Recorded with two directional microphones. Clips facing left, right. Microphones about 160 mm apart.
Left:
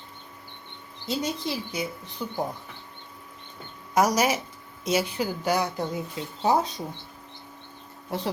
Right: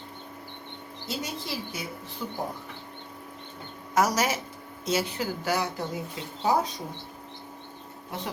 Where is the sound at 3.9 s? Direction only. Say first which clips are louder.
Left 3 dB; 15° left (ahead or behind).